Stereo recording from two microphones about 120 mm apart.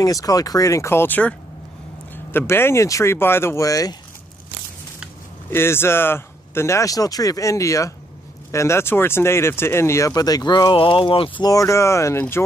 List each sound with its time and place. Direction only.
0.0 s speech: 30° left (ahead or behind); by 1.3 s 15° left (ahead or behind)
2.3 s speech: 20° left (ahead or behind)
5.5 s speech: 20° left (ahead or behind); by 11.4 s 45° left (ahead or behind)
11.4 s speech: 25° left (ahead or behind)